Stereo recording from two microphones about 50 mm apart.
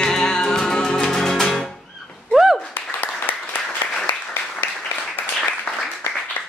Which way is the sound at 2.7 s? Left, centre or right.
Left.